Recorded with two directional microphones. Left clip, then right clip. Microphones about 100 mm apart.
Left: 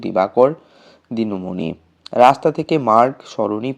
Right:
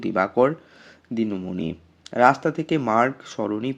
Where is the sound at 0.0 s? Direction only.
10° left (ahead or behind).